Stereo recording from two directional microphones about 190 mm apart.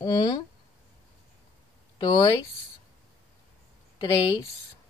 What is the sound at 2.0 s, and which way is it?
Speech, 20° left (ahead or behind).